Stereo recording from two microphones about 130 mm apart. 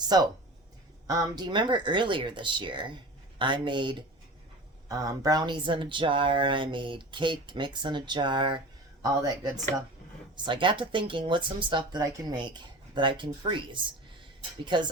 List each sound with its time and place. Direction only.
0.1 s speech: 30° right (ahead or behind)
4.9 s speech: 25° right (ahead or behind)
14.6 s speech: 35° right (ahead or behind)